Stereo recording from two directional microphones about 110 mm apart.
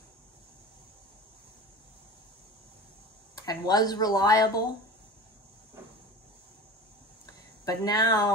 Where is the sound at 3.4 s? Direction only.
35° left (ahead or behind).